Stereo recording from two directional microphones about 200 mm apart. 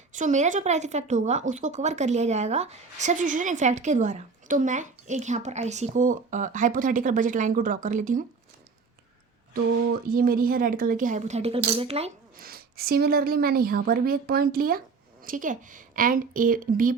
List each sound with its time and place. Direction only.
0.1 s a woman's voice: 40° right (ahead or behind)
10.1 s a woman's voice: 45° right (ahead or behind); by 12.1 s 30° right (ahead or behind)
12.4 s a woman's voice: 50° right (ahead or behind)